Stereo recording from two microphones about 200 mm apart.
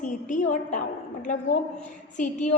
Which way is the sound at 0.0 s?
40° left (ahead or behind).